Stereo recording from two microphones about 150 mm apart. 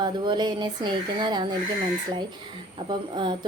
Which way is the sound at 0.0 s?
30° right (ahead or behind).